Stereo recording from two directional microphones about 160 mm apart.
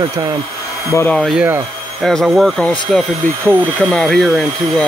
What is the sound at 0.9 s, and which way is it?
Speech, 15° left (ahead or behind).